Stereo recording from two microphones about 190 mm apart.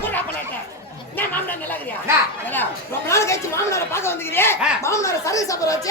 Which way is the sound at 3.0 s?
15° left (ahead or behind).